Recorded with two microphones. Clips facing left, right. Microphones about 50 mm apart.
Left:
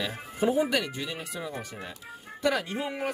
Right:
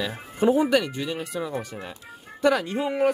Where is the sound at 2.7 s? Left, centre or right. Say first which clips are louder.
Right 8 dB; right.